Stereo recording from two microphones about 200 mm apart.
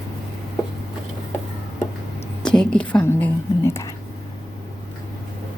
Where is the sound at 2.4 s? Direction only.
5° left (ahead or behind).